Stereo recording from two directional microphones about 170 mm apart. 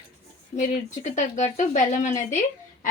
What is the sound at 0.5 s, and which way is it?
A woman's voice, 45° left (ahead or behind).